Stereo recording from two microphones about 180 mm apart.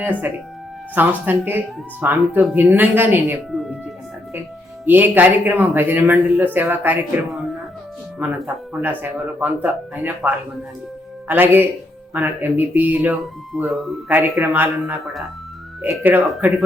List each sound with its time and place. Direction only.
0.0 s speech: 10° right (ahead or behind)
3.5 s music: centre (ahead or behind)
4.9 s speech: 10° right (ahead or behind)
8.2 s speech: 10° right (ahead or behind)